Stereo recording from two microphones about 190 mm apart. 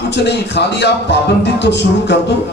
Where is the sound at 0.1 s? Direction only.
65° left (ahead or behind).